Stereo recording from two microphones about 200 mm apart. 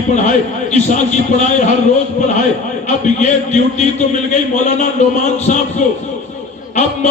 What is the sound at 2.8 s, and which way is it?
A man's voice, 35° left (ahead or behind).